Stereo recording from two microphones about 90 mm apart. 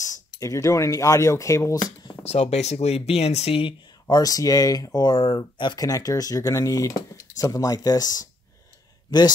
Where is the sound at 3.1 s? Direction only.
90° left.